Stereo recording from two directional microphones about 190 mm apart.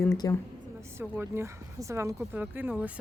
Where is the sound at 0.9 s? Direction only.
15° right (ahead or behind).